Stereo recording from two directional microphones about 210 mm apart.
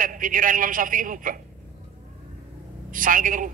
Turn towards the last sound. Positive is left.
turn(degrees=-40)  # may be behind; listen again after turning